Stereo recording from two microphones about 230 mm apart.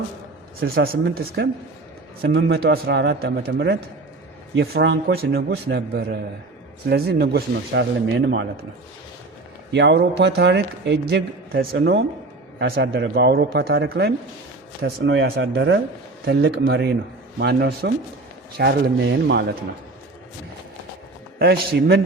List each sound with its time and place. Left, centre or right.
0.6 s a man's voice: right
9.7 s a man's voice: right
21.3 s a man's voice: right